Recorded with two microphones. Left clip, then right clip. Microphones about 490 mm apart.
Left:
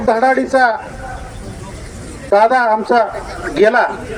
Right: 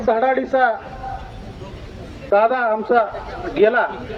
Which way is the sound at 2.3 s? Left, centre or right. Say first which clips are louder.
Left 5 dB; right.